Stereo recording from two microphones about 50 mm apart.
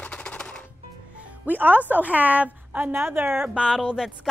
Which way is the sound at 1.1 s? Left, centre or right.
Right.